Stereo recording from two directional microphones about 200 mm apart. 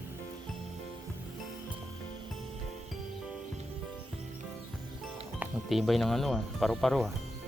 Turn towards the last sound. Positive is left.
turn(degrees=0)  # may be behind; listen again after turning